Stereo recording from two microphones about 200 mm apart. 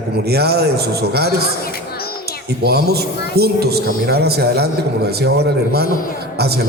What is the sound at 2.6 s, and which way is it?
A man's voice, 55° right (ahead or behind).